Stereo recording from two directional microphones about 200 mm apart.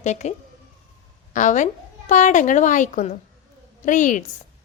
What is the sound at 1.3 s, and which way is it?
Speech, 40° left (ahead or behind).